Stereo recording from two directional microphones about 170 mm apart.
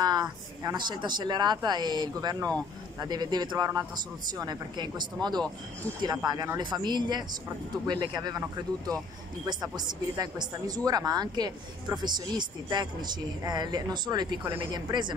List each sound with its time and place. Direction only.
0.0 s a woman's voice: 25° right (ahead or behind)